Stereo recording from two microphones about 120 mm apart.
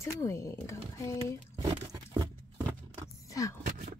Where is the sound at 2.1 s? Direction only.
35° right (ahead or behind).